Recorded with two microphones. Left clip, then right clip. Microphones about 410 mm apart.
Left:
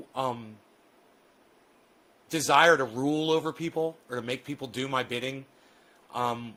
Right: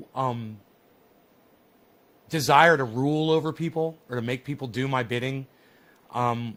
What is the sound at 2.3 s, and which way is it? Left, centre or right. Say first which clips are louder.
Speech: right 3 dB; right.